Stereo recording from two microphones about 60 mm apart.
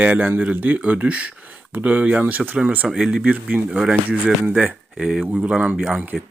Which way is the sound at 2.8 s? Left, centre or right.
Centre.